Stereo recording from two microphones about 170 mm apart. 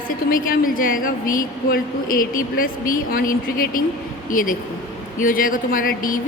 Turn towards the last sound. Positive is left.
turn(degrees=55)  # may be behind; listen again after turning